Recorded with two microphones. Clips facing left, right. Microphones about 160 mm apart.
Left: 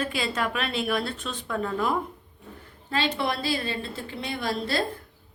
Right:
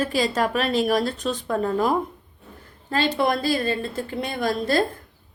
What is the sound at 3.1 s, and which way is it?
A woman's voice, 45° right (ahead or behind).